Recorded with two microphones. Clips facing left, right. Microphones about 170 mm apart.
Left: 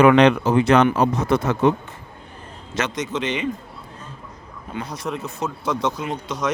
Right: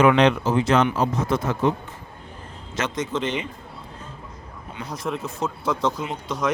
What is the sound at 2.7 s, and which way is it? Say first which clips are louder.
Speech: left 1 dB; 75° left (ahead or behind).